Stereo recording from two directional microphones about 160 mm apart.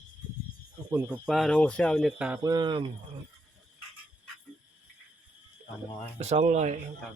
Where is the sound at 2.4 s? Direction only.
25° right (ahead or behind).